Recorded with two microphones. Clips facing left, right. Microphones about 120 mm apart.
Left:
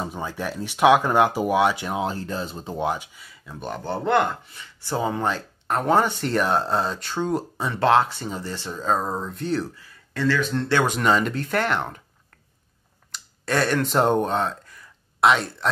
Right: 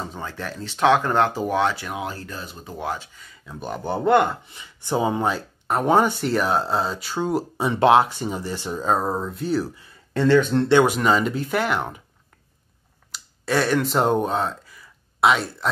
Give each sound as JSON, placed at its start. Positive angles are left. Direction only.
{"t": 0.0, "sound": "speech", "side_deg": 15}
{"t": 1.9, "sound": "speech", "side_deg": 25}
{"t": 4.5, "sound": "speech", "side_deg": -20}
{"t": 9.8, "sound": "speech", "side_deg": -25}
{"t": 10.9, "sound": "speech", "side_deg": 0}
{"t": 13.1, "sound": "speech", "side_deg": 0}